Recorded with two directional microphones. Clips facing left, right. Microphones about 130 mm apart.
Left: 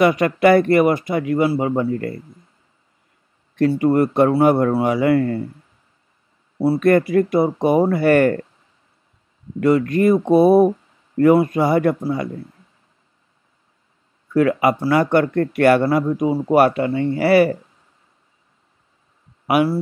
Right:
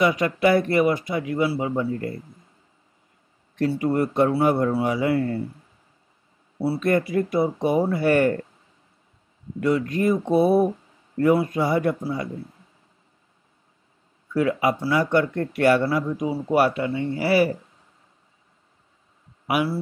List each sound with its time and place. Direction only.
0.0 s a man's voice: 60° left (ahead or behind)
3.5 s a man's voice: 60° left (ahead or behind)
6.6 s a man's voice: 55° left (ahead or behind)
9.6 s a man's voice: 60° left (ahead or behind)
14.3 s a man's voice: 60° left (ahead or behind)
19.4 s speech: 55° left (ahead or behind)